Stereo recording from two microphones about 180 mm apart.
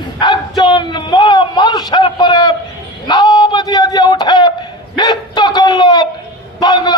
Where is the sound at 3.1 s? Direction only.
25° left (ahead or behind).